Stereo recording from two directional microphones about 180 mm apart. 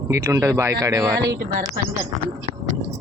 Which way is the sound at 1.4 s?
50° right (ahead or behind).